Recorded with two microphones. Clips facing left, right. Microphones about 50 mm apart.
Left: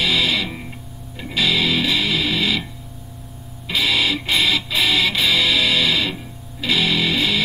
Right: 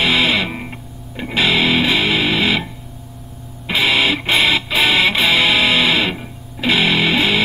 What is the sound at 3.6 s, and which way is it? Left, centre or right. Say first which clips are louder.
Music: right 4 dB; right.